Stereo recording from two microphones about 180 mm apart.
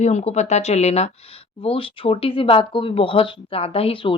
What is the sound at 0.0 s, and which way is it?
Speech, 40° left (ahead or behind).